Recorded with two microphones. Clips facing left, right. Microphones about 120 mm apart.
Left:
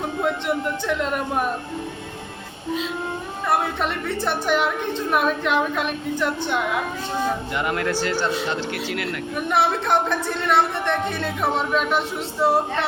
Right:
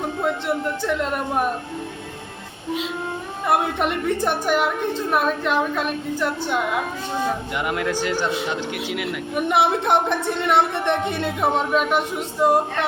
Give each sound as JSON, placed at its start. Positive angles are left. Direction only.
{"t": 0.0, "sound": "speech", "side_deg": 0}
{"t": 3.4, "sound": "a woman's voice", "side_deg": -15}
{"t": 11.4, "sound": "a woman's voice", "side_deg": -5}